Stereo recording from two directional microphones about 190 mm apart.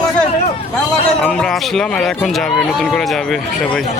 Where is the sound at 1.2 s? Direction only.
5° left (ahead or behind).